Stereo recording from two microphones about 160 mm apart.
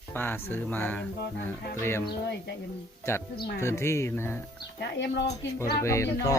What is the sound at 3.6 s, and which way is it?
Speech, 15° left (ahead or behind).